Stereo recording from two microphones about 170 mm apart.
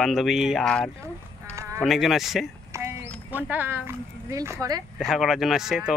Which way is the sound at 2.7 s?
15° right (ahead or behind).